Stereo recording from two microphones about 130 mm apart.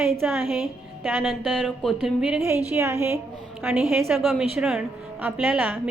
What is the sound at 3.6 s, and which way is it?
A woman's voice, 5° right (ahead or behind).